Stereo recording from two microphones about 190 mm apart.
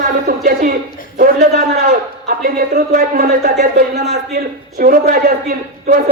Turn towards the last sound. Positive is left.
turn(degrees=-45)  # may be behind; listen again after turning